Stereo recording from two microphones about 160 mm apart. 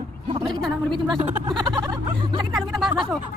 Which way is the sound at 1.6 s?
30° right (ahead or behind).